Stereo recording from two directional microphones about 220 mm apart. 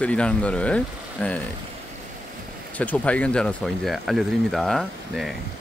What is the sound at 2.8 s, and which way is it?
Speech, 5° left (ahead or behind).